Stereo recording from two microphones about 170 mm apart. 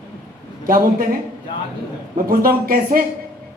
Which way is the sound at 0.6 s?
55° right (ahead or behind).